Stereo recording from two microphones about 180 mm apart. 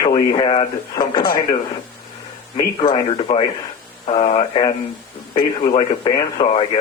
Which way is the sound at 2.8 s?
25° left (ahead or behind).